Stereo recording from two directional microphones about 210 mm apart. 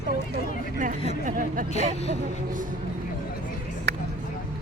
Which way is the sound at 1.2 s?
40° right (ahead or behind).